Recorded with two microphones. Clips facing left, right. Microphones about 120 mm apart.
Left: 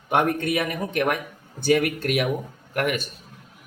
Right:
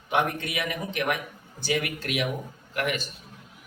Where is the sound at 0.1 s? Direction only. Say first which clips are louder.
Left 5 dB; 50° left (ahead or behind).